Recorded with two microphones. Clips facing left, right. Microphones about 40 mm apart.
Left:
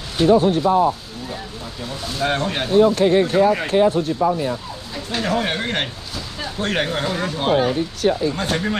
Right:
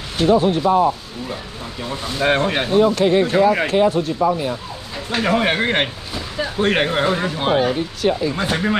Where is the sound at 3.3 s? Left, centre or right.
Right.